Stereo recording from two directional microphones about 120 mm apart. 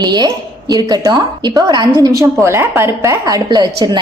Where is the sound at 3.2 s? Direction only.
35° right (ahead or behind).